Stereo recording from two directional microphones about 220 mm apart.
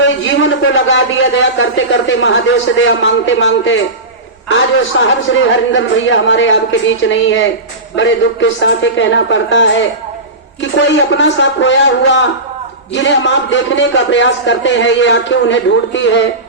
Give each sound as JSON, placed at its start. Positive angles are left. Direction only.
{"t": 0.0, "sound": "a man's voice", "side_deg": 60}